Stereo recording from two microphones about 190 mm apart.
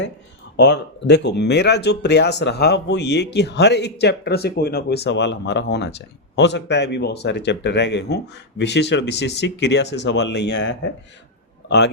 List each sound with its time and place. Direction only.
0.5 s speech: 65° left (ahead or behind)